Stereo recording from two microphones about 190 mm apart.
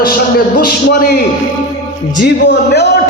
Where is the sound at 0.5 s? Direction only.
50° left (ahead or behind).